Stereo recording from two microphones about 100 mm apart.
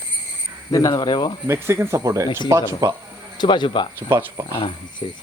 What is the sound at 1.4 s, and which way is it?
Speech, 25° right (ahead or behind).